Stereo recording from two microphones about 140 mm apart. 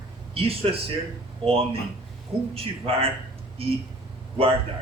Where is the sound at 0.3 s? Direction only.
40° right (ahead or behind).